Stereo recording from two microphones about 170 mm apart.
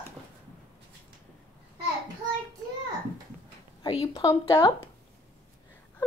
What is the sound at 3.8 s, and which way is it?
Speech, 35° left (ahead or behind).